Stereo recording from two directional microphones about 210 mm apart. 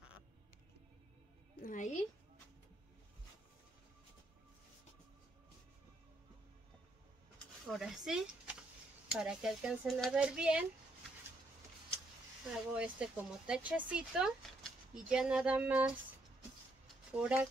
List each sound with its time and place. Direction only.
1.6 s music: 40° left (ahead or behind)
7.6 s speech: centre (ahead or behind)
12.7 s speech: 5° right (ahead or behind)
16.8 s a sound: 5° right (ahead or behind)